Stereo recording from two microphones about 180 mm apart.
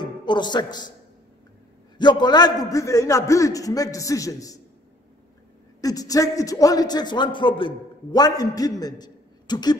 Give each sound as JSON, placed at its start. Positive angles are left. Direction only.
{"t": 0.0, "sound": "speech", "side_deg": 25}
{"t": 2.0, "sound": "a man's voice", "side_deg": 25}
{"t": 5.8, "sound": "a man's voice", "side_deg": 20}